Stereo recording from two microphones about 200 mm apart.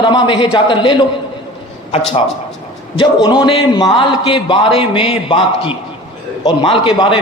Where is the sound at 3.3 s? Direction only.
25° left (ahead or behind).